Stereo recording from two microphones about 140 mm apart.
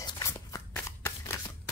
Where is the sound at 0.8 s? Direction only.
15° left (ahead or behind).